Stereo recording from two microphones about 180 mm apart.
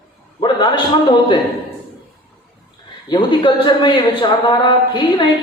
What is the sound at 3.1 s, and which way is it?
A man's voice, 25° left (ahead or behind).